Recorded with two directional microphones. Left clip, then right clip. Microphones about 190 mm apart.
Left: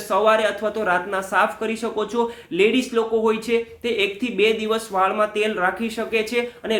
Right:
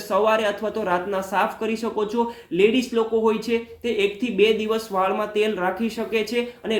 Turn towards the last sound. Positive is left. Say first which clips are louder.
# left 2 dB
turn(degrees=15)  # may be behind; listen again after turning